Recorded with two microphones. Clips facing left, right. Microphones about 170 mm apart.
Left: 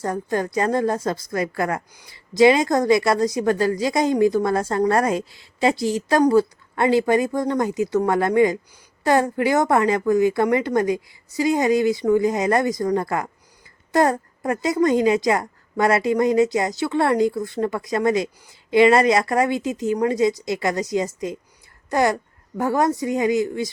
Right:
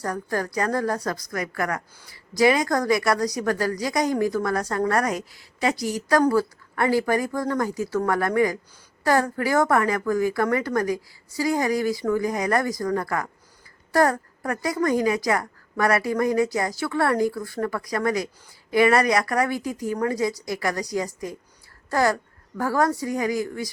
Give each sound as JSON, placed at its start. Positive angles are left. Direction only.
{"t": 0.0, "sound": "a woman's voice", "side_deg": 20}